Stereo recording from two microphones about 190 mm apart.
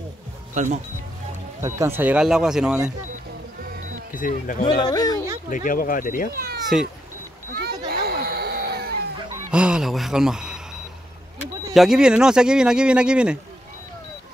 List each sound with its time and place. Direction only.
0.6 s speech: 35° right (ahead or behind)
1.6 s speech: 15° right (ahead or behind)
4.1 s speech: 45° left (ahead or behind)
4.6 s speech: 20° left (ahead or behind)
5.5 s speech: 45° left (ahead or behind)
6.3 s speech: 55° right (ahead or behind)
7.5 s children playing: 55° right (ahead or behind)
9.5 s speech: 5° right (ahead or behind)
11.7 s speech: centre (ahead or behind)